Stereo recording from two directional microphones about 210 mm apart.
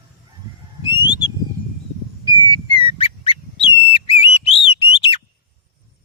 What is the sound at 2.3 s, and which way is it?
Whistle, 20° left (ahead or behind).